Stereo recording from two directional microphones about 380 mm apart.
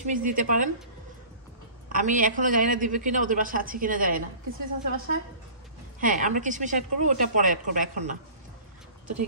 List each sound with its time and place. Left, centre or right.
0.0 s a woman's voice: right
1.9 s a woman's voice: right